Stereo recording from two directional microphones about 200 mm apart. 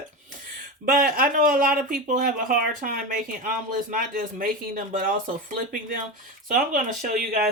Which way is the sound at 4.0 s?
45° right (ahead or behind).